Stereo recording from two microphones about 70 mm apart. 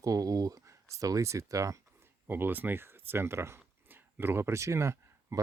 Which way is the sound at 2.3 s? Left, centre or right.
Right.